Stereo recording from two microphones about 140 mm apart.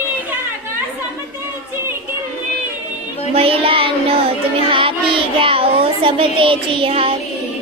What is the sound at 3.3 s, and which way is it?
Child singing, 45° right (ahead or behind).